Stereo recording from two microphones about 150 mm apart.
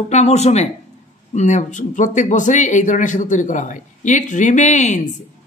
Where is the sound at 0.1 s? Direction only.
50° left (ahead or behind).